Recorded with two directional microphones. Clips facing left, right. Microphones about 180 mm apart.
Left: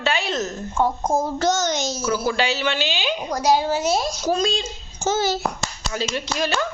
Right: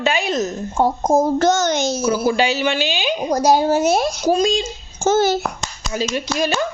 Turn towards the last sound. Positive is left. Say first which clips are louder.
# right 4 dB
turn(degrees=-10)  # may be behind; listen again after turning